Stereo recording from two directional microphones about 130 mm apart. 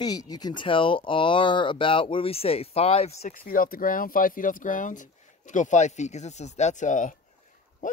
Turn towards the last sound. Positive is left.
turn(degrees=75)  # may be behind; listen again after turning